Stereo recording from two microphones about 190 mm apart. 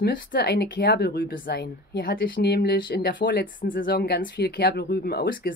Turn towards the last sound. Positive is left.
turn(degrees=55)  # may be behind; listen again after turning